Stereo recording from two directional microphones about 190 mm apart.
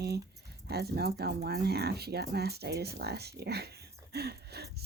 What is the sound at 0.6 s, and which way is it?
Speech, 60° right (ahead or behind).